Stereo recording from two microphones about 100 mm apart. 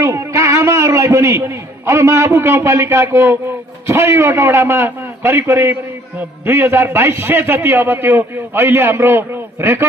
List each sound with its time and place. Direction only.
0.0 s a man's voice: 30° right (ahead or behind)